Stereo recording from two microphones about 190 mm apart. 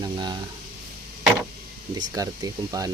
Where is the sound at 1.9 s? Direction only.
20° right (ahead or behind).